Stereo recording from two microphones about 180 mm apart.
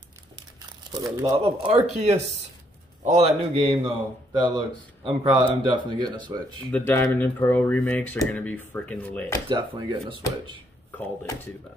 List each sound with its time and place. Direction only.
0.6 s crumpling: 20° right (ahead or behind)
1.4 s speech: 35° right (ahead or behind)
3.0 s a man's voice: 40° right (ahead or behind)
3.5 s a man's voice: 30° right (ahead or behind)
6.7 s speech: 10° left (ahead or behind)
9.5 s a man's voice: 25° right (ahead or behind)